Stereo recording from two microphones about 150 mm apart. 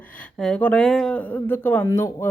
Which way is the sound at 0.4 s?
5° left (ahead or behind).